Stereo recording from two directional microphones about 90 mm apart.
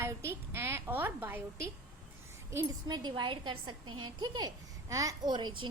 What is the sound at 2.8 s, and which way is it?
Speech, 50° right (ahead or behind).